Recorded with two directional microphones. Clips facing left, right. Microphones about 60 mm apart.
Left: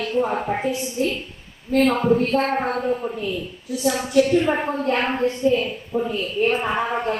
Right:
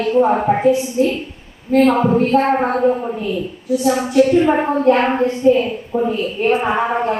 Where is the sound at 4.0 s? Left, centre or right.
Right.